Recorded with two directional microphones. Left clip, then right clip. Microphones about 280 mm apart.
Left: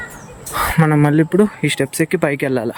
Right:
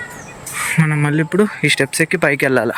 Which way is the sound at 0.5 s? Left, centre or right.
Centre.